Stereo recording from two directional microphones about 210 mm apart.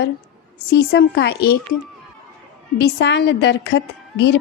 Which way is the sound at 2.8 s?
55° left (ahead or behind).